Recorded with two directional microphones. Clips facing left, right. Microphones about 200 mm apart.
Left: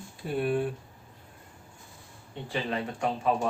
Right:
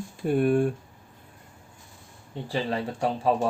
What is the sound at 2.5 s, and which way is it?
Speech, 35° right (ahead or behind).